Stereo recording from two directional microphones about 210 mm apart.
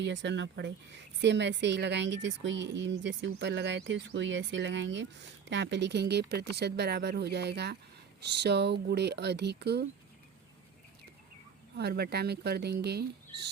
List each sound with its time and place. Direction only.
0.0 s speech: 60° right (ahead or behind)
11.8 s speech: 50° right (ahead or behind)